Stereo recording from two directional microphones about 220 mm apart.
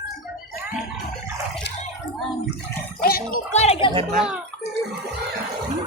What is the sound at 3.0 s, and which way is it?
Gargling, 40° left (ahead or behind).